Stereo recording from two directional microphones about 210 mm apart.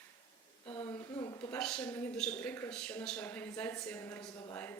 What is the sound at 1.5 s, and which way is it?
A woman's voice, 5° left (ahead or behind).